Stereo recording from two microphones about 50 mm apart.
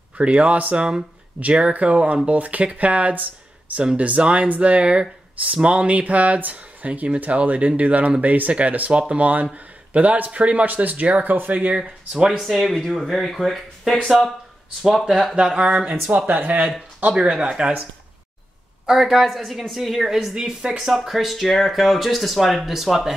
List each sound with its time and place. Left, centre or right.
0.2 s speech: right
12.4 s speech: centre
15.4 s speech: right
17.1 s speech: centre
18.9 s speech: centre